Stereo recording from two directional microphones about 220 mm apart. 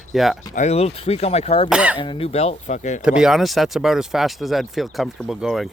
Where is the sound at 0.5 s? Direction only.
30° left (ahead or behind).